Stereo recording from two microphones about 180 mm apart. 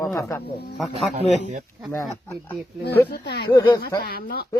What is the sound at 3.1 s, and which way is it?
Speech, 65° left (ahead or behind).